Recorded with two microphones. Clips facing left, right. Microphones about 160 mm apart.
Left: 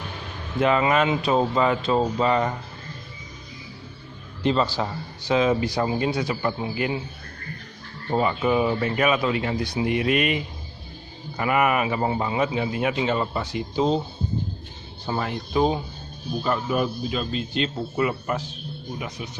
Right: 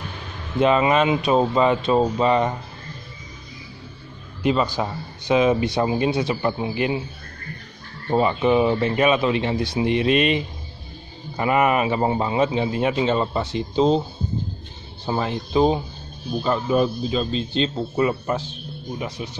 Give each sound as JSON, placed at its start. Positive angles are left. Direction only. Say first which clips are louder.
{"t": 0.6, "sound": "a man's voice", "louder": "right 3 dB", "side_deg": -20}
{"t": 4.4, "sound": "a man's voice", "louder": "right 1 dB", "side_deg": -10}
{"t": 8.1, "sound": "a man's voice", "louder": "right 3 dB", "side_deg": -20}
{"t": 15.0, "sound": "a man's voice", "louder": "right 3 dB", "side_deg": -25}